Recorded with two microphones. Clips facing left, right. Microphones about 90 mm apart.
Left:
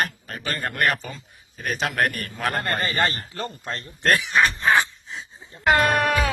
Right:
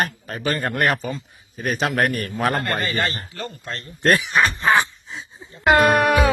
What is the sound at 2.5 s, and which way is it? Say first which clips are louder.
Speech: right 2 dB; 40° right (ahead or behind).